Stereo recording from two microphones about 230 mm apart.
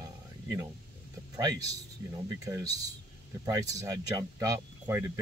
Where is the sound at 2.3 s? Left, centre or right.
Centre.